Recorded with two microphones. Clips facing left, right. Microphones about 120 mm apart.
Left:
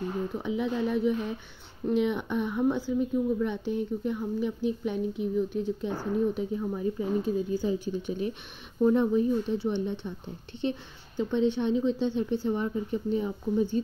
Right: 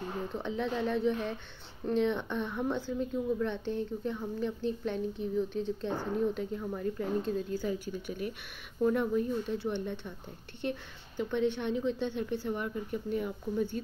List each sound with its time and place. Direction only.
0.3 s speech: 10° left (ahead or behind)
7.6 s a woman's voice: 20° left (ahead or behind)